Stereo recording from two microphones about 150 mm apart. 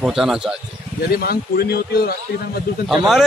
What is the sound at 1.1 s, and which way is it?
Speech, 85° left.